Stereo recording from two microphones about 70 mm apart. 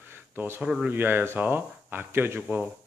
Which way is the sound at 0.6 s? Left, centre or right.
Centre.